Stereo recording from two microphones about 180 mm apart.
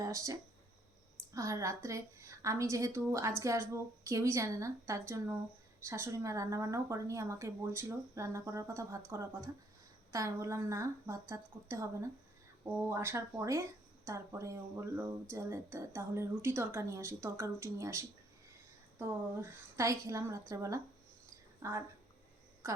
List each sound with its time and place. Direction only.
0.0 s a woman's voice: 15° right (ahead or behind)